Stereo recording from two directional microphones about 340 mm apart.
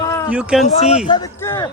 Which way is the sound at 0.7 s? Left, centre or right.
Centre.